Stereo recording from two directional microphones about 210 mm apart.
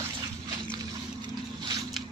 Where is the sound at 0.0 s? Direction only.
20° right (ahead or behind).